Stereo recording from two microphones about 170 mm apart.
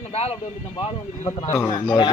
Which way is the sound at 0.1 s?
35° left (ahead or behind).